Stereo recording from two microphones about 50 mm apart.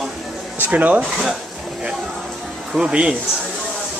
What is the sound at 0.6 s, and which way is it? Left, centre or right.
Speech, right.